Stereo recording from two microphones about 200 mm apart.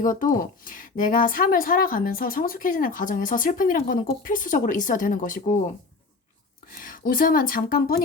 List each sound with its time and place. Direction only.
0.0 s speech: 40° left (ahead or behind)
6.7 s speech: 45° left (ahead or behind)